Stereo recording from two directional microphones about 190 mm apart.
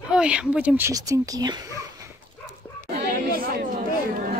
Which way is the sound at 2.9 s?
55° right (ahead or behind).